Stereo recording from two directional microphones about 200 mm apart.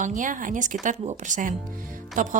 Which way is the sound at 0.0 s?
40° right (ahead or behind).